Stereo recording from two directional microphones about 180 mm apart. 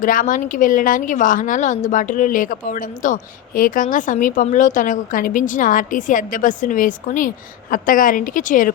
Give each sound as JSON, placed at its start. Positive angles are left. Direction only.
{"t": 0.0, "sound": "a woman's voice", "side_deg": 50}